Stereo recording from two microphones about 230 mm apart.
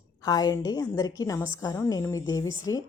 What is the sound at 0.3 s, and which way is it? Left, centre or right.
A woman's voice, centre.